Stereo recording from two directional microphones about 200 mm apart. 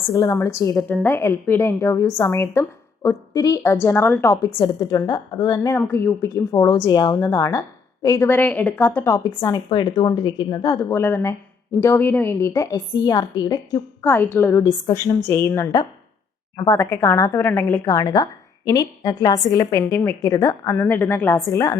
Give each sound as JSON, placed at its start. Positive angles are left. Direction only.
{"t": 0.1, "sound": "a woman's voice", "side_deg": 15}
{"t": 0.8, "sound": "a woman's voice", "side_deg": 5}